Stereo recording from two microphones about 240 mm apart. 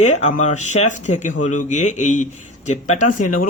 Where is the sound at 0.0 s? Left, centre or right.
Left.